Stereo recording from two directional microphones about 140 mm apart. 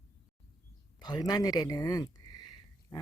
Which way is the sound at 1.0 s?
30° left (ahead or behind).